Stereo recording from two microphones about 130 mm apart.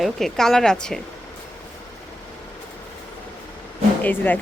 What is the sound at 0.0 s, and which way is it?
Speech, 5° left (ahead or behind).